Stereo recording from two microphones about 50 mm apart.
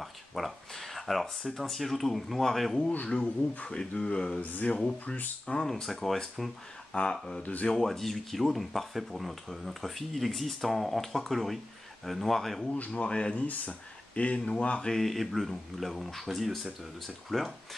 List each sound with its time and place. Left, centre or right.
0.0 s a sound: centre
1.4 s speech: centre
3.1 s speech: centre
4.4 s speech: left
5.7 s speech: centre
6.9 s speech: centre
7.6 s speech: centre
12.6 s speech: left
14.9 s speech: centre